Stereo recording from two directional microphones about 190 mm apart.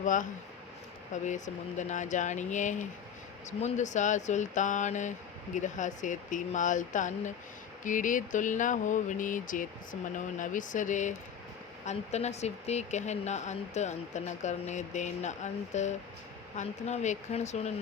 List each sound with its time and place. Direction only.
0.0 s speech: 40° left (ahead or behind)